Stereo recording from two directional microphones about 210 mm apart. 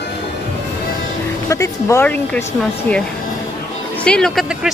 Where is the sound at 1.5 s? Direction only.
15° left (ahead or behind).